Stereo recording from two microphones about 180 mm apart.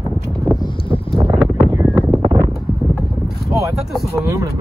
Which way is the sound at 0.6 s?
30° left (ahead or behind).